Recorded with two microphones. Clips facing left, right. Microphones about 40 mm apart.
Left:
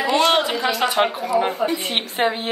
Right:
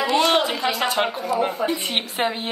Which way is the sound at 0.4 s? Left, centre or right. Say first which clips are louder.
Left 2 dB; left.